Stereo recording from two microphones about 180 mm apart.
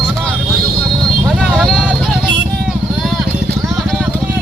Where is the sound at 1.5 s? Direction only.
Centre (ahead or behind).